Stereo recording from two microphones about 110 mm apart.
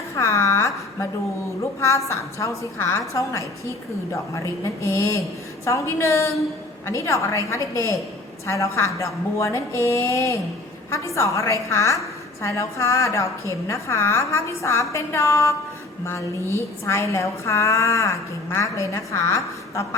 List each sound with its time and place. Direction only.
0.2 s a sound: 25° left (ahead or behind)
1.8 s a woman's voice: 30° left (ahead or behind)
16.6 s a woman's voice: 25° left (ahead or behind)